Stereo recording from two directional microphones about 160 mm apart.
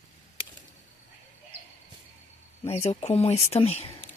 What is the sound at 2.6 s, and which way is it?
Speech, 40° left (ahead or behind).